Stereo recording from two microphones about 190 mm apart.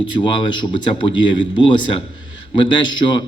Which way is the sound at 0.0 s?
25° left (ahead or behind).